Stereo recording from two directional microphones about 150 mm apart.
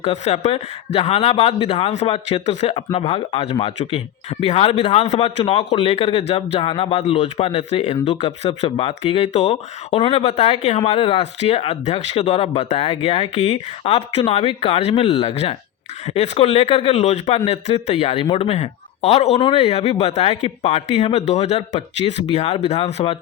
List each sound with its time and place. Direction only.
0.0 s a man's voice: 45° left (ahead or behind)